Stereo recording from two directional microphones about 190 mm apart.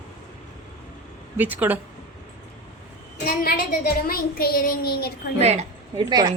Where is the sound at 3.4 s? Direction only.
50° left (ahead or behind).